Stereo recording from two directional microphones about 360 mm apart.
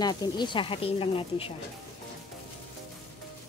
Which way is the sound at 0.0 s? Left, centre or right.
Centre.